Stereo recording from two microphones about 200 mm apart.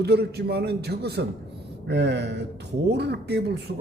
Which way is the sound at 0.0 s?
55° right (ahead or behind).